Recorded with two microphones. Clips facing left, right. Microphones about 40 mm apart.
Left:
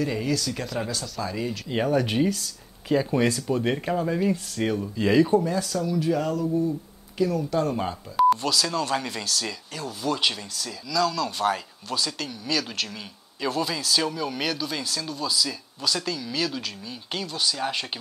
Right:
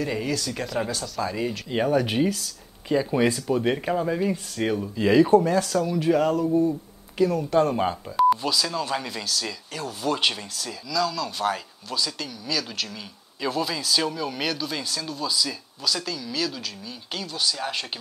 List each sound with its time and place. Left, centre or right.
0.0 s speech: centre
3.3 s speech: right
3.5 s speech: centre
5.4 s speech: right
8.6 s speech: centre
12.2 s speech: centre
13.4 s speech: centre
15.8 s speech: centre